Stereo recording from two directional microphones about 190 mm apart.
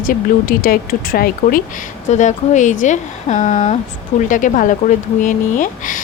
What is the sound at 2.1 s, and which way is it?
Speech, 40° left (ahead or behind).